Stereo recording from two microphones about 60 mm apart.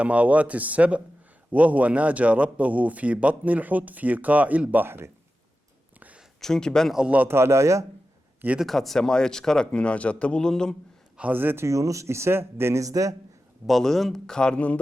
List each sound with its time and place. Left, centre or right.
0.0 s a man's voice: right
4.9 s speech: right
6.4 s a man's voice: centre
7.3 s speech: right
8.6 s a man's voice: centre
11.2 s speech: right
11.6 s speech: right
12.8 s a man's voice: right
13.7 s a man's voice: centre; by 14.8 s left